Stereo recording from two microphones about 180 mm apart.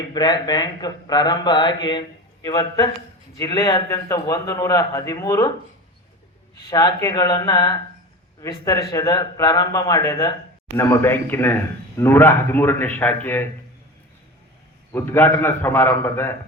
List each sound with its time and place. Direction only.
0.1 s speech: 25° left (ahead or behind)
6.7 s a man's voice: 20° left (ahead or behind)
14.9 s a man's voice: 10° left (ahead or behind)